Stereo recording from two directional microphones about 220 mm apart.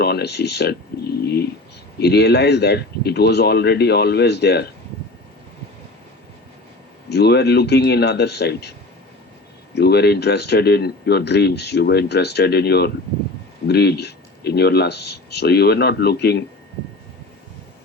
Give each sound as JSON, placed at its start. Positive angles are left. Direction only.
{"t": 0.0, "sound": "speech", "side_deg": 45}
{"t": 7.1, "sound": "speech", "side_deg": 50}
{"t": 9.7, "sound": "speech", "side_deg": 45}